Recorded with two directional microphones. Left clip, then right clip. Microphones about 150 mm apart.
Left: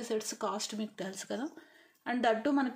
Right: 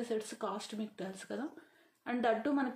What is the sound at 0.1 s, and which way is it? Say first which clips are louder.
Speech: left 6 dB; 40° left (ahead or behind).